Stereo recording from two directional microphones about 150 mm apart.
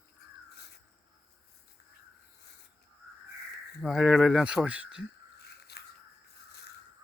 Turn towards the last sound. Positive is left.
turn(degrees=90)